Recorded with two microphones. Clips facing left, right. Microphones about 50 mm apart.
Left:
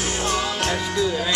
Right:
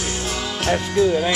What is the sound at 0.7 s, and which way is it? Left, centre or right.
Speech, right.